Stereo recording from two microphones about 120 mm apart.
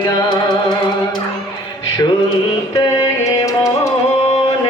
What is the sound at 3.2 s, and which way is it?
Music, 25° left (ahead or behind).